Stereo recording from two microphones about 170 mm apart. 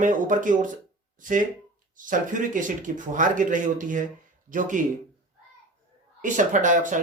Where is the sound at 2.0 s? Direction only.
50° right (ahead or behind).